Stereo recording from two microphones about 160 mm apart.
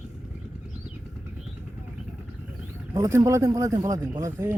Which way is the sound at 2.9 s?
20° right (ahead or behind).